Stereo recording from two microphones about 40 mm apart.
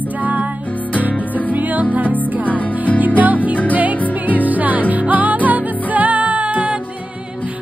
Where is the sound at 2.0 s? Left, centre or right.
Left.